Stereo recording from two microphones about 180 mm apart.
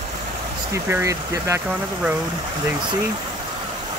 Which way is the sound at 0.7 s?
15° right (ahead or behind).